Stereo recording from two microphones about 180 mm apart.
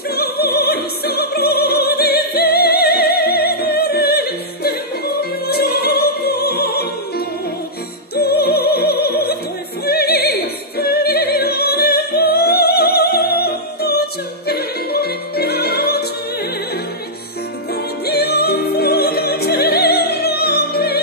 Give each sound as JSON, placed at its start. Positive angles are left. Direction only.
{"t": 0.1, "sound": "opera", "side_deg": 60}
{"t": 10.8, "sound": "music", "side_deg": 60}
{"t": 18.0, "sound": "music", "side_deg": 60}